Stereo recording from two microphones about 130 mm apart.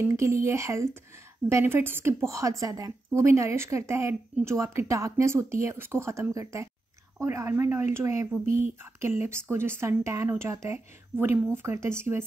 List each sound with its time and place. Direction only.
0.0 s a woman's voice: 25° right (ahead or behind)
8.5 s speech: 90° right
9.5 s a woman's voice: 20° right (ahead or behind)